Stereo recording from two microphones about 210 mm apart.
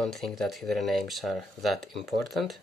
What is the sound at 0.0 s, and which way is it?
Speech, centre (ahead or behind).